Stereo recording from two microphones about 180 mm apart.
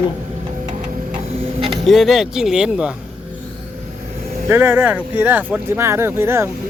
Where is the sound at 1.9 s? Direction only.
Centre (ahead or behind).